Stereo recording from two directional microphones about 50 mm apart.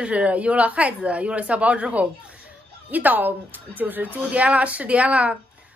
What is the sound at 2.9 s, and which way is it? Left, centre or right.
Speech, right.